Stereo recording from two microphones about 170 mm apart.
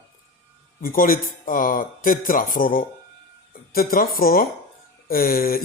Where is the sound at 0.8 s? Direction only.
55° left (ahead or behind).